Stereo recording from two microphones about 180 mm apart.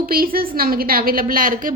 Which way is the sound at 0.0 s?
55° right (ahead or behind).